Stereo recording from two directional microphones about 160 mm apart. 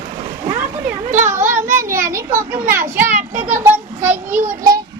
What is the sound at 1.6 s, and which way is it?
Children playing, 15° right (ahead or behind).